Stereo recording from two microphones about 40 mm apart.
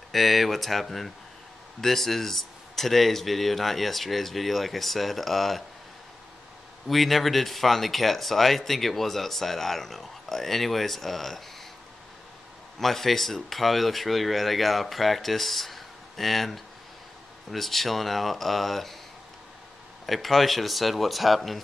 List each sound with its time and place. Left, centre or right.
0.1 s speech: centre
6.9 s speech: centre
12.7 s speech: centre
20.1 s speech: centre